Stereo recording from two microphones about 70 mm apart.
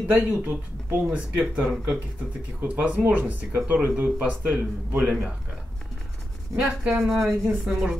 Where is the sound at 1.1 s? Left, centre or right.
Centre.